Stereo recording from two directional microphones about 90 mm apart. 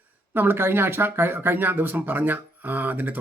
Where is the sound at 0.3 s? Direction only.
25° right (ahead or behind).